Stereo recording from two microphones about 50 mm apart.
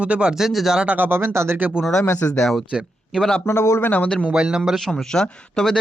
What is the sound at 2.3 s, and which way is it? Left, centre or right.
Speech, centre.